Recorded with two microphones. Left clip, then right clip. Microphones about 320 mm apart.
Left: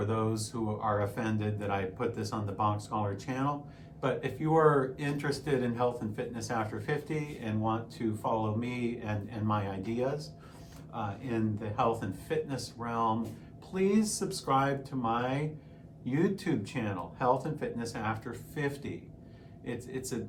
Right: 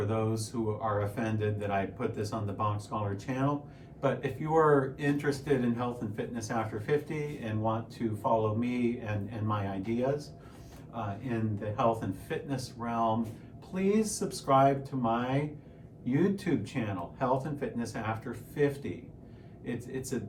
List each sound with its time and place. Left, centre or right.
0.0 s speech: centre